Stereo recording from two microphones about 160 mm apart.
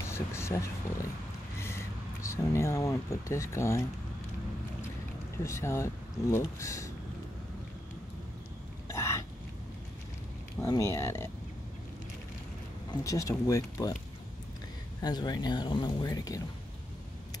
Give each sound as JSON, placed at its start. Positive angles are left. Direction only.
{"t": 0.0, "sound": "speech", "side_deg": 15}
{"t": 5.4, "sound": "speech", "side_deg": 15}
{"t": 8.8, "sound": "hiccup", "side_deg": 15}
{"t": 10.6, "sound": "speech", "side_deg": 20}
{"t": 13.0, "sound": "speech", "side_deg": 20}
{"t": 15.0, "sound": "speech", "side_deg": 25}